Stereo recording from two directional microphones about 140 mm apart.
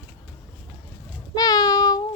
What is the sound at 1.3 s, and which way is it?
Child singing, 25° left (ahead or behind).